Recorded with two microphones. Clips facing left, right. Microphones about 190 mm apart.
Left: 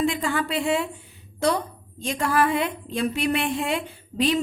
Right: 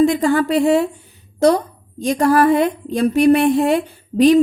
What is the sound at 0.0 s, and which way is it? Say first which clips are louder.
A woman's voice: right 10 dB; 40° right (ahead or behind).